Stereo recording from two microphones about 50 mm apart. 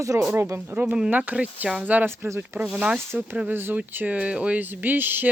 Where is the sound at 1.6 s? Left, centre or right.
Right.